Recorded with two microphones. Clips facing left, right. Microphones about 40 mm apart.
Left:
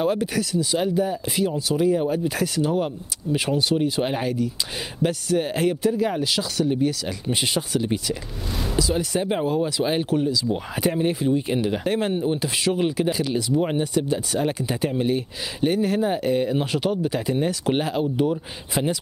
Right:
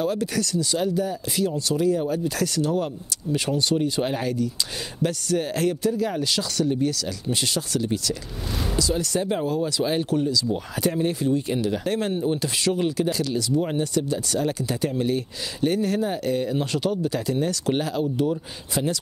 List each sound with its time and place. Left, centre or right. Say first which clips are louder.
0.0 s speech: left 2 dB; centre